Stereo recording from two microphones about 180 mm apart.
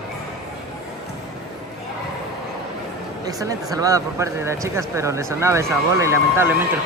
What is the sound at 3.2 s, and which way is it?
Speech, 20° right (ahead or behind).